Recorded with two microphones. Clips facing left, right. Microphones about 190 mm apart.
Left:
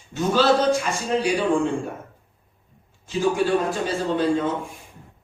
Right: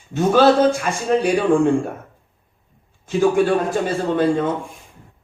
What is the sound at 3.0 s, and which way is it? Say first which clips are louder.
A man's voice: right 5 dB; 55° right (ahead or behind).